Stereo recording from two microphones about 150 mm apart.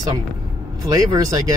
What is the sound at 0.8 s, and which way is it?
Speech, 25° right (ahead or behind).